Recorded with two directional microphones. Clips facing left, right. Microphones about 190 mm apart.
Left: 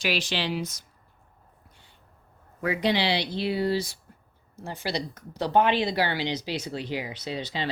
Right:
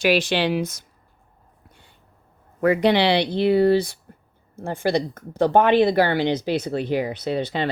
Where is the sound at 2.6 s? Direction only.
55° right (ahead or behind).